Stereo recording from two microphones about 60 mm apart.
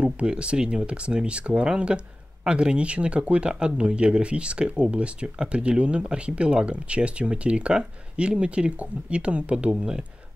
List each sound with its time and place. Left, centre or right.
0.0 s speech: centre